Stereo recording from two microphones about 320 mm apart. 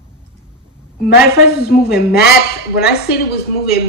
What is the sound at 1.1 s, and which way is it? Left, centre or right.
Speech, left.